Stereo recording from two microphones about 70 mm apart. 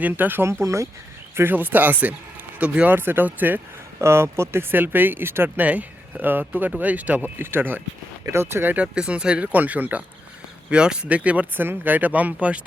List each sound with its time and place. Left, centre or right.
0.1 s speech: right
0.4 s speech: right
1.4 s speech: right
4.0 s speech: right
5.6 s speech: right
8.7 s speech: centre